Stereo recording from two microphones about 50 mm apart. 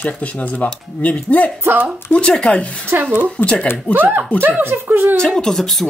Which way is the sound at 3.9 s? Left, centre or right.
Right.